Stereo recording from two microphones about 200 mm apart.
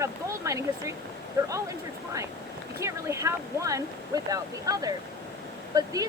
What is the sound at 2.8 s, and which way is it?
Speech, 15° right (ahead or behind).